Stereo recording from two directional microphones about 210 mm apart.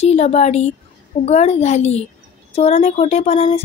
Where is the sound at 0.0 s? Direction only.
30° left (ahead or behind).